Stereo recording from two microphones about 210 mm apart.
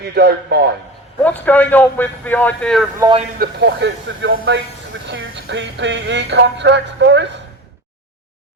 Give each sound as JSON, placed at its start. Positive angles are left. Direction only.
{"t": 0.0, "sound": "a man's voice", "side_deg": -50}
{"t": 1.2, "sound": "a man's voice", "side_deg": 10}
{"t": 3.0, "sound": "speech", "side_deg": -25}
{"t": 3.3, "sound": "speech", "side_deg": -50}